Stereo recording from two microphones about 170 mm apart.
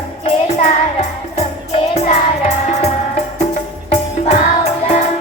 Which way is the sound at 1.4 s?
40° left (ahead or behind).